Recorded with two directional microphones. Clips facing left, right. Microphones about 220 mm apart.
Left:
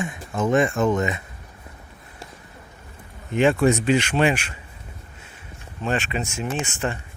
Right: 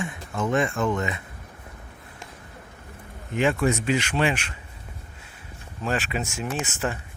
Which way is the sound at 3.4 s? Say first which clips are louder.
Left 5 dB; 30° left (ahead or behind).